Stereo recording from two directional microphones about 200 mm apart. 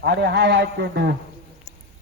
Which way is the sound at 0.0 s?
55° right (ahead or behind).